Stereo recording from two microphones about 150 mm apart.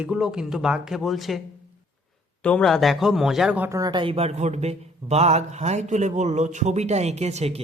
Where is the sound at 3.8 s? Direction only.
30° right (ahead or behind).